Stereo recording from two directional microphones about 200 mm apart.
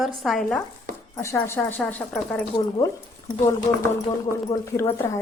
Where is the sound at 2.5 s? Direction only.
20° left (ahead or behind).